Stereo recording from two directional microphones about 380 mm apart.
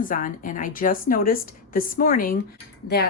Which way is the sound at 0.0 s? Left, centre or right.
Left.